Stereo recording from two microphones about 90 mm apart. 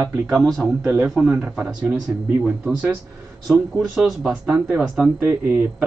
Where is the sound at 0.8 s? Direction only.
15° right (ahead or behind).